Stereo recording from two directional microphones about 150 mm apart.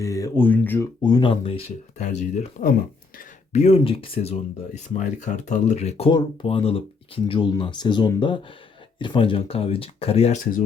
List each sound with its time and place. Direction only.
0.0 s speech: 20° left (ahead or behind)
1.0 s speech: 30° left (ahead or behind)
2.0 s speech: 50° left (ahead or behind)
3.2 s a sound: 50° left (ahead or behind)
3.8 s speech: 35° left (ahead or behind)
6.1 s speech: 35° left (ahead or behind)